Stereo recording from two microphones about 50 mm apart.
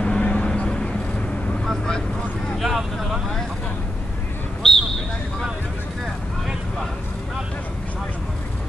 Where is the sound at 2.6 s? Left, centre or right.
Centre.